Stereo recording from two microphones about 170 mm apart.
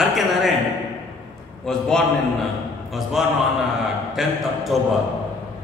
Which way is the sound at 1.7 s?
5° left (ahead or behind).